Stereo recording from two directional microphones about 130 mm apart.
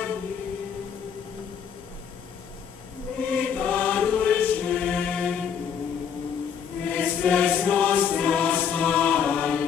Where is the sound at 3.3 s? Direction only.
10° left (ahead or behind).